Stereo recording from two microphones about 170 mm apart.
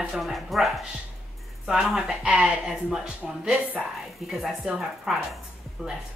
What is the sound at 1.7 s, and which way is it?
Speech, 5° right (ahead or behind).